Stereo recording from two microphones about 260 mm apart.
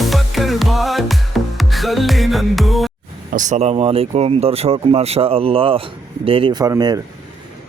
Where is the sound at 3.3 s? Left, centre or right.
Right.